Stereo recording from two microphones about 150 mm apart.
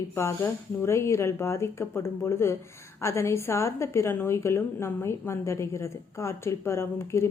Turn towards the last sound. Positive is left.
turn(degrees=20)  # may be behind; listen again after turning